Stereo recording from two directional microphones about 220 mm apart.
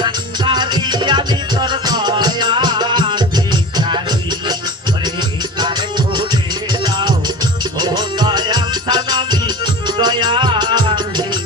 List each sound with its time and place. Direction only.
0.0 s music: 20° right (ahead or behind)
5.5 s music: 20° right (ahead or behind)